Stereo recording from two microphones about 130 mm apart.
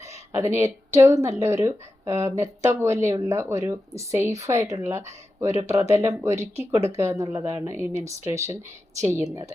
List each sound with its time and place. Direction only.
0.3 s speech: 20° right (ahead or behind)